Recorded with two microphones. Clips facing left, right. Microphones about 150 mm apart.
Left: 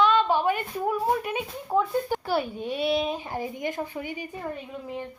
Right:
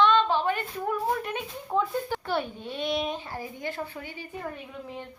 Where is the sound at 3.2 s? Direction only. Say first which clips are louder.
Left 5 dB; 20° left (ahead or behind).